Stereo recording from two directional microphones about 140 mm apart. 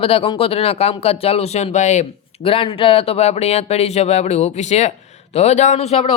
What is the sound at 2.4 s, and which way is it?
Speech, 40° left (ahead or behind).